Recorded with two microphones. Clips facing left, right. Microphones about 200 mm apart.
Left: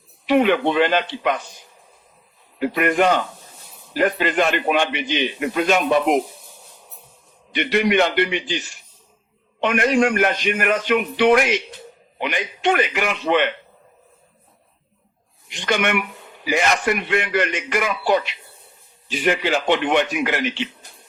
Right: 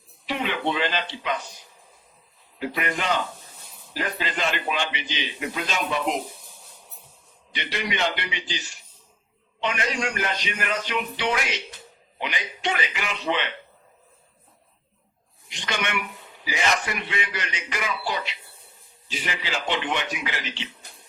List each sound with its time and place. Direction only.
0.3 s speech: 55° left (ahead or behind)
2.6 s a man's voice: 55° left (ahead or behind)
7.5 s a man's voice: 55° left (ahead or behind)
15.4 s a man's voice: 55° left (ahead or behind)